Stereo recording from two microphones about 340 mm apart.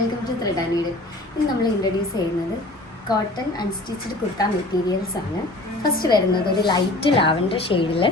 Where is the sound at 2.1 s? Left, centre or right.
Centre.